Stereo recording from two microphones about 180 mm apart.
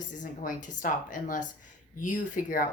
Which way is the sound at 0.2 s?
45° left (ahead or behind).